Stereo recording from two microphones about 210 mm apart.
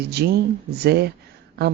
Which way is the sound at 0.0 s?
50° right (ahead or behind).